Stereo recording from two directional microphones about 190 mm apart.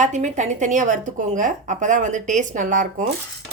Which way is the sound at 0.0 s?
40° right (ahead or behind).